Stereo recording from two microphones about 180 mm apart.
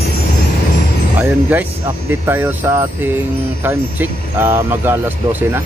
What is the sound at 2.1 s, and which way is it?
Speech, 10° right (ahead or behind).